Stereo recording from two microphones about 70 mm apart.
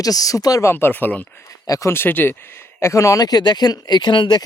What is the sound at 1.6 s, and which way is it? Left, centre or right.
Speech, left.